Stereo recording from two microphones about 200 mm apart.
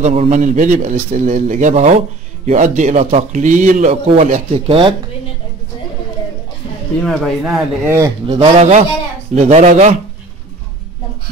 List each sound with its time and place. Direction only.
0.0 s speech: 35° right (ahead or behind)
7.0 s speech: centre (ahead or behind)
7.8 s speech: 15° right (ahead or behind)
8.4 s speech: 35° right (ahead or behind)